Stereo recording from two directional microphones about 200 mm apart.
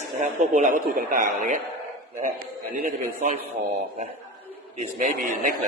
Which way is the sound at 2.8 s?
35° right (ahead or behind).